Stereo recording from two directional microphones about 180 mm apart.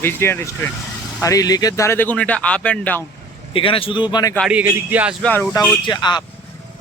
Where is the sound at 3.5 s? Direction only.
30° left (ahead or behind).